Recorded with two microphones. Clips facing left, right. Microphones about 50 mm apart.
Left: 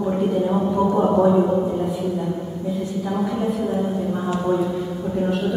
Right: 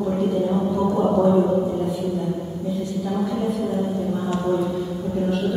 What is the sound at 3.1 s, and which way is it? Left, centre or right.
Speech, centre.